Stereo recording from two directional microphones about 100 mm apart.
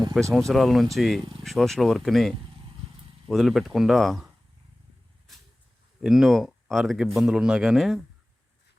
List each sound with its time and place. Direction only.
0.3 s speech: centre (ahead or behind)
1.2 s a sound: 65° right (ahead or behind)
1.5 s speech: 5° left (ahead or behind)
6.0 s speech: 5° right (ahead or behind)